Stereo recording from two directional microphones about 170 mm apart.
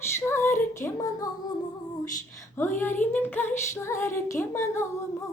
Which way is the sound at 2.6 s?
10° left (ahead or behind).